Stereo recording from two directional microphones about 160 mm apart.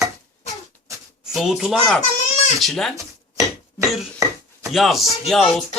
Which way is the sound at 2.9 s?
20° right (ahead or behind).